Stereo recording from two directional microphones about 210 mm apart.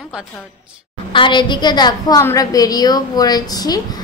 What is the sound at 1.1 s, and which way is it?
A woman's voice, 20° left (ahead or behind).